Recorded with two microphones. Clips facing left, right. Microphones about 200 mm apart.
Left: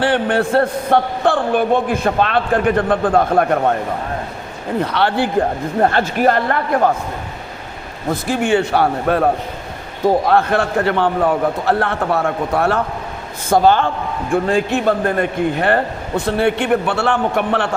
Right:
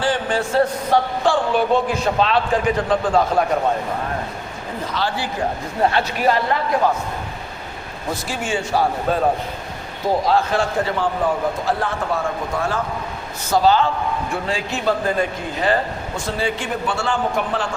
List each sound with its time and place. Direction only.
0.0 s a man's voice: 60° left (ahead or behind)
4.8 s a man's voice: 65° left (ahead or behind)
5.8 s speech: 50° left (ahead or behind)
8.1 s a man's voice: 60° left (ahead or behind)
10.2 s a man's voice: 60° left (ahead or behind)
13.5 s a man's voice: 55° left (ahead or behind)